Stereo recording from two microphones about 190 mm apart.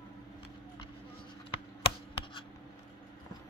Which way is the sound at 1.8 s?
30° left (ahead or behind).